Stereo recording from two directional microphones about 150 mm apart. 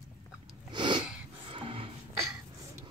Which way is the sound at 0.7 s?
30° right (ahead or behind).